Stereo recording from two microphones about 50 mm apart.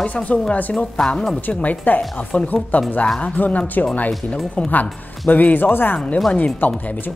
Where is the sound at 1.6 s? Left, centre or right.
Left.